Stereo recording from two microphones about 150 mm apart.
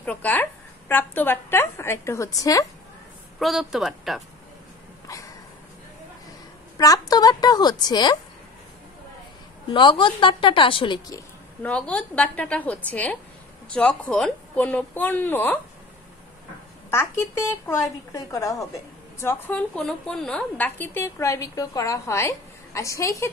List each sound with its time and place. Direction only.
0.0 s a woman's voice: 10° left (ahead or behind)
3.3 s speech: centre (ahead or behind)
5.0 s a sound: 20° left (ahead or behind)
6.8 s a woman's voice: 25° left (ahead or behind)
9.7 s a woman's voice: 30° left (ahead or behind)
11.6 s speech: 10° left (ahead or behind)
16.9 s a woman's voice: 15° left (ahead or behind)